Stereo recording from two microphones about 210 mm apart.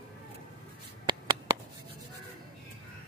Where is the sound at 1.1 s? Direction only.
20° right (ahead or behind).